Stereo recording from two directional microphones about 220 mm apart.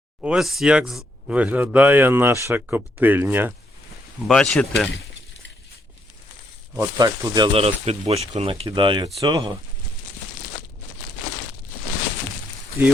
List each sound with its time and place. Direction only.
0.2 s speech: centre (ahead or behind)
4.3 s speech: 5° left (ahead or behind)
6.7 s speech: 20° right (ahead or behind)